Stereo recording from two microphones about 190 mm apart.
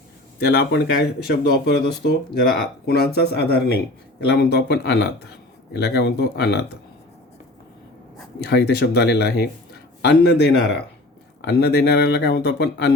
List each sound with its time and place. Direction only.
0.3 s speech: 60° left (ahead or behind)
8.4 s speech: 60° left (ahead or behind)